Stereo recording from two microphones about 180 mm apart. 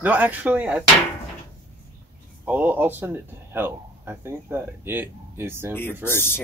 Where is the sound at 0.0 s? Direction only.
10° right (ahead or behind).